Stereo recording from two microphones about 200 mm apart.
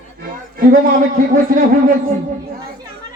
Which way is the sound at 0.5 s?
45° right (ahead or behind).